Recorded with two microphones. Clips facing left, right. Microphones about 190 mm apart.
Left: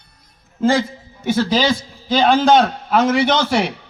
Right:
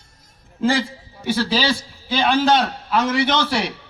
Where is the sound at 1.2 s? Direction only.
50° left (ahead or behind).